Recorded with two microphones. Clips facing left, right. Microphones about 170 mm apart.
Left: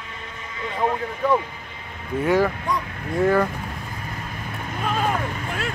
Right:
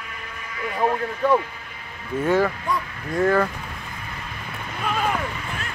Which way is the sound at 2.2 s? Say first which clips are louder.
Left 1 dB; 15° left (ahead or behind).